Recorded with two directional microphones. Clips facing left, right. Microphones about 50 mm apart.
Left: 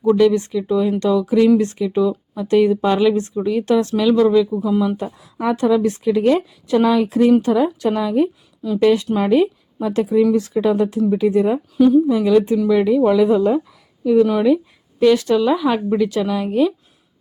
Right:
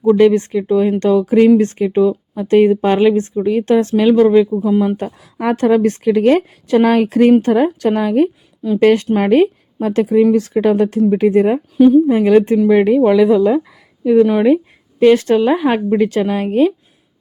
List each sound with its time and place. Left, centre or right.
0.0 s speech: right
4.7 s speech: right
4.9 s speech: right
14.0 s speech: right
14.3 s speech: right